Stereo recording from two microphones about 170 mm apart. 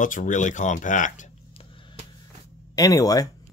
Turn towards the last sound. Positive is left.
turn(degrees=20)  # may be behind; listen again after turning